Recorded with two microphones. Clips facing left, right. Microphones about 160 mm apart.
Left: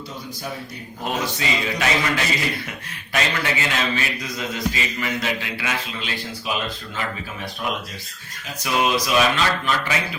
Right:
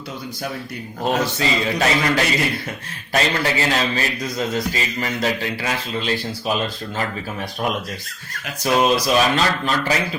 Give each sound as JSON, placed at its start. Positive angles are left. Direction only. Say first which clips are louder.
{"t": 1.0, "sound": "a man's voice", "louder": "right 5 dB", "side_deg": -35}
{"t": 8.6, "sound": "a man's voice", "louder": "right 4 dB", "side_deg": -35}